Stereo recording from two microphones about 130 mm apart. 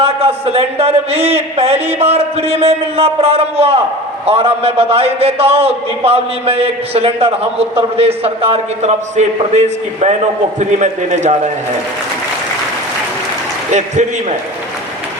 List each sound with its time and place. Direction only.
0.0 s a man's voice: 50° right (ahead or behind)
13.7 s a man's voice: 65° right (ahead or behind)